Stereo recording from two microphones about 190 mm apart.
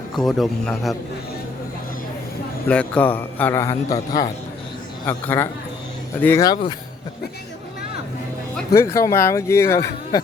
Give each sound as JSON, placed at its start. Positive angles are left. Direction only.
{"t": 0.2, "sound": "a man's voice", "side_deg": 0}
{"t": 2.6, "sound": "a man's voice", "side_deg": 5}
{"t": 8.7, "sound": "speech", "side_deg": 15}